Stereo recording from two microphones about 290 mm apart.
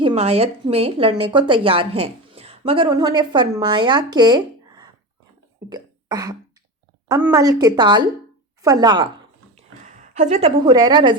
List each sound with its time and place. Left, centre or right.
0.0 s a woman's voice: centre
5.6 s cough: centre
7.1 s a woman's voice: centre
9.8 s a woman's voice: right